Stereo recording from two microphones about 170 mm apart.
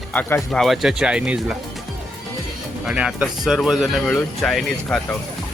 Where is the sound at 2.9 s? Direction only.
5° right (ahead or behind).